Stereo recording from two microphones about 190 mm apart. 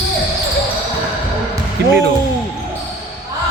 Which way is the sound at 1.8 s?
60° right (ahead or behind).